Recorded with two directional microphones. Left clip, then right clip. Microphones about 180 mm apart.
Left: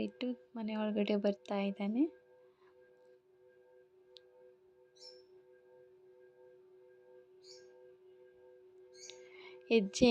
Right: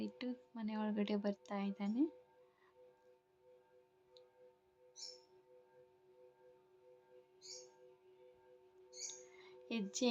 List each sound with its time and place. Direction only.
0.0 s a woman's voice: 20° left (ahead or behind)
9.0 s music: 30° left (ahead or behind)